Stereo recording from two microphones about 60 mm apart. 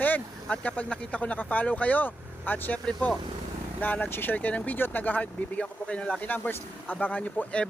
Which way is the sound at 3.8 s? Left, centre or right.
Left.